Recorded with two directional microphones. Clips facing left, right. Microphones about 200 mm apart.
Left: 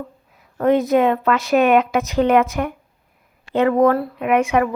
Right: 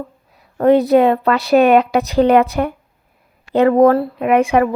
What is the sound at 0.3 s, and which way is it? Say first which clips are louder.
A woman's voice: right 4 dB; 35° right (ahead or behind).